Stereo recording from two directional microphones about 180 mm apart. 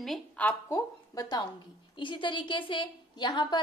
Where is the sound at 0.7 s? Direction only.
20° left (ahead or behind).